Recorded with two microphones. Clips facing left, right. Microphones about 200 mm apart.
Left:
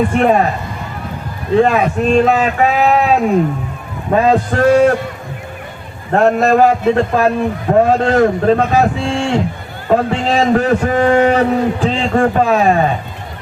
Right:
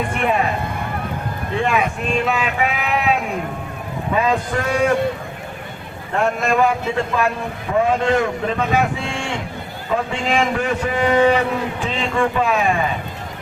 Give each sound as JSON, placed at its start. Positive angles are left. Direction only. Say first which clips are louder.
{"t": 0.2, "sound": "a man's voice", "louder": "left 7 dB", "side_deg": 40}
{"t": 1.5, "sound": "a man's voice", "louder": "left 8 dB", "side_deg": 40}
{"t": 6.1, "sound": "a man's voice", "louder": "left 8 dB", "side_deg": 40}